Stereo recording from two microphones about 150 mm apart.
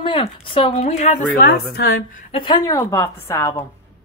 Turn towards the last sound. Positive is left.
turn(degrees=20)  # may be behind; listen again after turning